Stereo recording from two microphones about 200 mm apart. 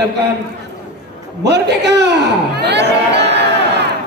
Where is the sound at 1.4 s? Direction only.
55° right (ahead or behind).